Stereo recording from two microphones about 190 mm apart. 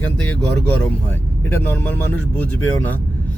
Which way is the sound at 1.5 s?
10° left (ahead or behind).